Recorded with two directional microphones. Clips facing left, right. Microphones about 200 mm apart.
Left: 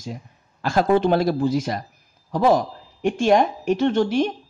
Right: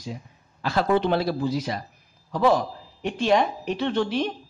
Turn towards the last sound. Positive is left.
turn(degrees=45)  # may be behind; listen again after turning